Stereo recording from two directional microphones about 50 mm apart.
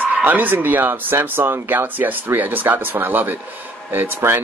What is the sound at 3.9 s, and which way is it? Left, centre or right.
Mantra, right.